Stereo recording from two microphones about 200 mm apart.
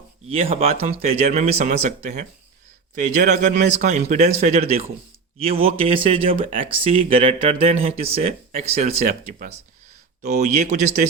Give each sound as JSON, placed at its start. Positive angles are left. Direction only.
{"t": 0.3, "sound": "speech", "side_deg": -30}